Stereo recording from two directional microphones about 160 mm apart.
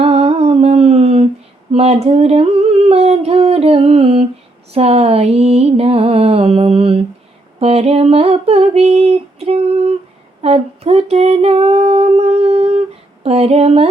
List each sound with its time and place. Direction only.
0.0 s humming: 35° right (ahead or behind)
1.7 s a sound: 40° right (ahead or behind)
4.7 s mantra: 40° right (ahead or behind)
7.6 s female singing: 40° right (ahead or behind)
10.4 s humming: 40° right (ahead or behind)
13.2 s a sound: 40° right (ahead or behind)